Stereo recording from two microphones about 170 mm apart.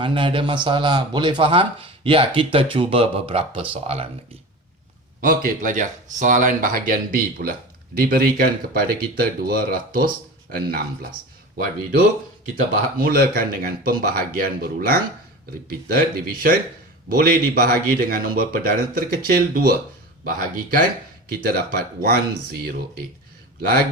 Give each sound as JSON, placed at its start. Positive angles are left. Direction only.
{"t": 0.0, "sound": "speech", "side_deg": -30}
{"t": 5.2, "sound": "speech", "side_deg": -55}
{"t": 23.6, "sound": "speech", "side_deg": -65}